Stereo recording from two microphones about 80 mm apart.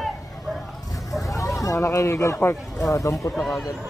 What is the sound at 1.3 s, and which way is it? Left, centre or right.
Speech, left.